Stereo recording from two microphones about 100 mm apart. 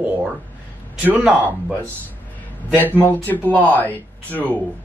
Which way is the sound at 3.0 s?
20° left (ahead or behind).